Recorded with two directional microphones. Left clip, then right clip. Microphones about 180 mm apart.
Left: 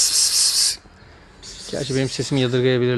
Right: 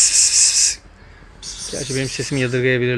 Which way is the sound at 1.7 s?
15° left (ahead or behind).